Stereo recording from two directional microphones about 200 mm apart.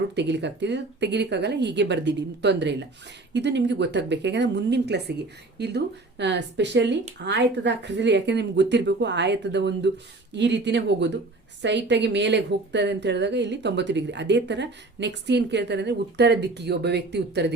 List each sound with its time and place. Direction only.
0.2 s a woman's voice: 60° right (ahead or behind)